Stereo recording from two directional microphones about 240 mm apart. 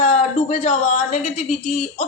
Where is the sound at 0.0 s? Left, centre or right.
Left.